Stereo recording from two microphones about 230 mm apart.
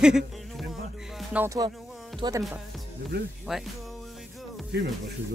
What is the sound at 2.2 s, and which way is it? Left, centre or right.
Music, centre.